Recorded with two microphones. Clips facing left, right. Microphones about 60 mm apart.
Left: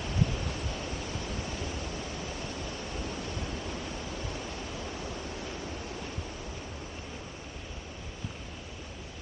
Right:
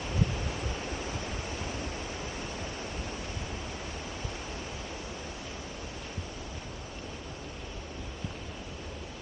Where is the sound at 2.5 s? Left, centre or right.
Left.